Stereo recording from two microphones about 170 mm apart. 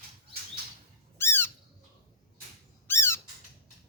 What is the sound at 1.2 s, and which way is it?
Squawk, 15° left (ahead or behind).